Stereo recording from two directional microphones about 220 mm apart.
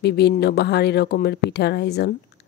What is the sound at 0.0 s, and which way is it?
A woman's voice, 50° left (ahead or behind).